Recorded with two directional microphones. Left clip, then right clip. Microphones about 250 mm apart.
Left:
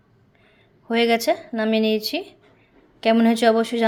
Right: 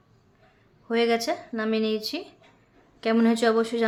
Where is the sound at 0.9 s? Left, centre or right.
Centre.